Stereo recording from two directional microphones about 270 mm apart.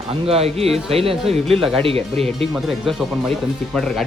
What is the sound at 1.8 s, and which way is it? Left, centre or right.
Speech, right.